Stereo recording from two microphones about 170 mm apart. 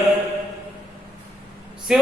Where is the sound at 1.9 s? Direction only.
5° right (ahead or behind).